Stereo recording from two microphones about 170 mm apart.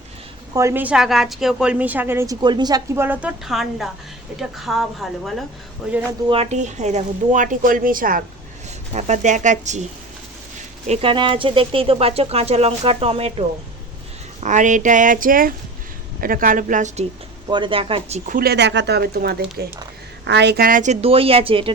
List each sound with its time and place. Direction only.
0.5 s a woman's voice: 15° right (ahead or behind)
6.2 s speech: 35° right (ahead or behind); by 8.2 s 55° right (ahead or behind)
8.9 s speech: 45° right (ahead or behind)
10.8 s speech: 35° right (ahead or behind)
14.4 s speech: 50° right (ahead or behind)
17.5 s speech: 30° right (ahead or behind)
18.3 s speech: 60° right (ahead or behind)
20.2 s speech: 90° right; by 21.7 s 35° right (ahead or behind)